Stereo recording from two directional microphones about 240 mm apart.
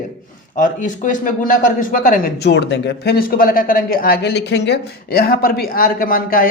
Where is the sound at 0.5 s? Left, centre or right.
Left.